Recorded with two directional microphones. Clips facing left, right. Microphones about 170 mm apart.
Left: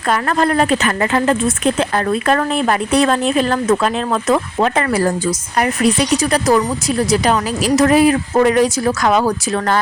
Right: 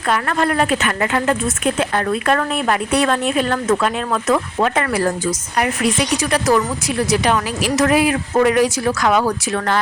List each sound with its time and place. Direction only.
0.1 s speech: 35° left (ahead or behind)
7.8 s speech: 35° left (ahead or behind)